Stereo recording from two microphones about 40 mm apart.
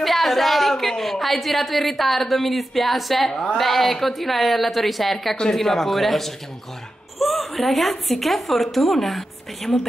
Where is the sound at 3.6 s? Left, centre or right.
Centre.